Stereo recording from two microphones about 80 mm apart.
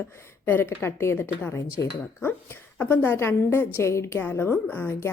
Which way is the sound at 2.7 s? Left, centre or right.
Left.